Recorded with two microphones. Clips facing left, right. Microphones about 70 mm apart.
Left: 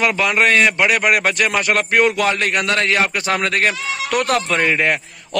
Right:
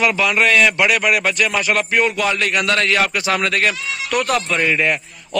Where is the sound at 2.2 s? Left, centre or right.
Left.